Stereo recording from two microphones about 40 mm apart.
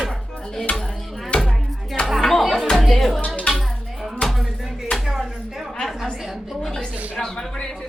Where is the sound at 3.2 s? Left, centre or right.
Left.